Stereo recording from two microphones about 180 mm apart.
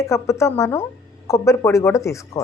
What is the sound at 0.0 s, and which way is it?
A woman's voice, 15° left (ahead or behind).